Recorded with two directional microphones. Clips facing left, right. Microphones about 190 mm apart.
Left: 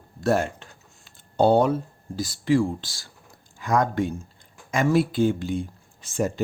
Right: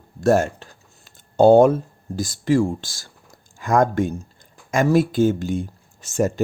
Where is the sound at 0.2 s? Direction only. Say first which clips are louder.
Right 5 dB; 45° right (ahead or behind).